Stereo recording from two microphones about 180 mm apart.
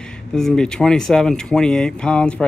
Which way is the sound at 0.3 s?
5° left (ahead or behind).